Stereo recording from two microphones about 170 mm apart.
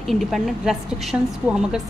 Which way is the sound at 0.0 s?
Centre (ahead or behind).